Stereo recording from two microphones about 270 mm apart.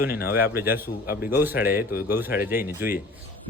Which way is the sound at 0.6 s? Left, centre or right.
Centre.